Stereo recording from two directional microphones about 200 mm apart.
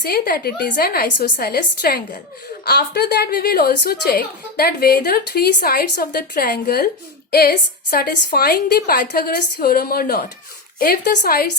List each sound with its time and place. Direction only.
0.0 s a woman's voice: 50° left (ahead or behind)